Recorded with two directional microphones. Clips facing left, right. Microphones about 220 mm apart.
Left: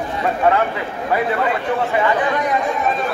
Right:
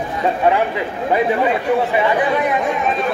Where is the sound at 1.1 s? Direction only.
20° right (ahead or behind).